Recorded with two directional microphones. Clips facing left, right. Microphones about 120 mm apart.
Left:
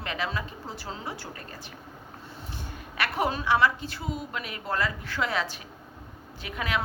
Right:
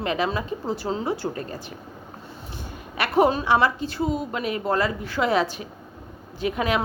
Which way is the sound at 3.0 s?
20° right (ahead or behind).